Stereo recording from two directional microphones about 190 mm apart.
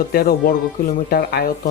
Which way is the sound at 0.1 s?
50° left (ahead or behind).